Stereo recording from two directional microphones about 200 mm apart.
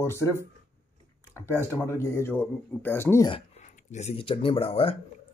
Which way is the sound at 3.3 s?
35° left (ahead or behind).